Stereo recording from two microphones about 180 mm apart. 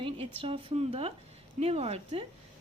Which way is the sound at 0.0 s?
30° right (ahead or behind).